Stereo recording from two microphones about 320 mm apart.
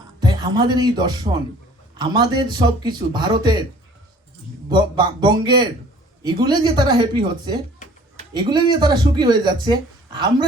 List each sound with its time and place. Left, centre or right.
0.2 s a man's voice: centre
4.7 s a man's voice: centre
8.1 s a sound: centre
8.7 s a man's voice: centre